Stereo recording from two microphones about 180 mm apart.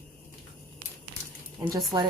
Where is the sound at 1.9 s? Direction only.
25° right (ahead or behind).